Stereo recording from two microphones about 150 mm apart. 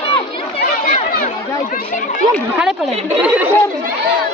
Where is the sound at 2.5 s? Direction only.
5° right (ahead or behind).